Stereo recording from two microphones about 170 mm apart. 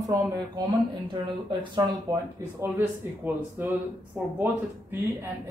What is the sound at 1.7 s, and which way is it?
Speech, 15° right (ahead or behind).